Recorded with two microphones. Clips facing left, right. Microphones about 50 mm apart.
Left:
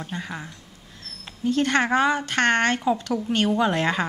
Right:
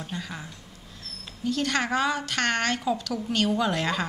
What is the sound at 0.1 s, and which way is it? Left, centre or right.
Speech, left.